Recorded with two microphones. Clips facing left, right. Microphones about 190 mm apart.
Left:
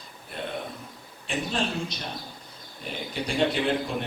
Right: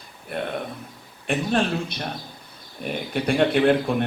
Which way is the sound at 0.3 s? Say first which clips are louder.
Right 5 dB; 60° right (ahead or behind).